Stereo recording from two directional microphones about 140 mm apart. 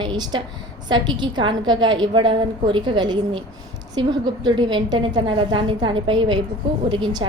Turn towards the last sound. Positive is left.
turn(degrees=-30)  # may be behind; listen again after turning